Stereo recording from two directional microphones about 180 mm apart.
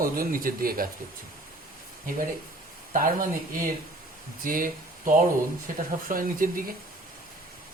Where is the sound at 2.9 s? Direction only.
50° right (ahead or behind).